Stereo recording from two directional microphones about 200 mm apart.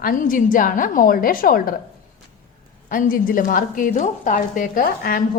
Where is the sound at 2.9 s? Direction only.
45° left (ahead or behind).